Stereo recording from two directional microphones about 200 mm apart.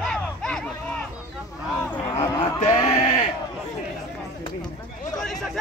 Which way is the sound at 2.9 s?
35° left (ahead or behind).